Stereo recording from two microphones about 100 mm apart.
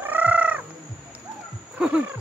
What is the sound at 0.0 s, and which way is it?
Fowl, 20° right (ahead or behind).